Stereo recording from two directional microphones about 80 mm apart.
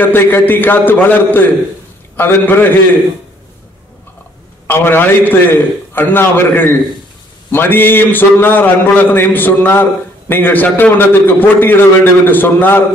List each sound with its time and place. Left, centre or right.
0.0 s a man's voice: left
4.6 s a man's voice: left